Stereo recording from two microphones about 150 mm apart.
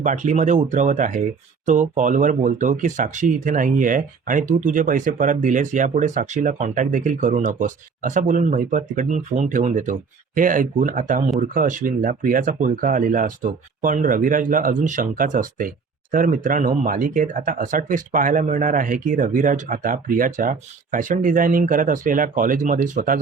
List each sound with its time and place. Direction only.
0.0 s speech: 55° right (ahead or behind)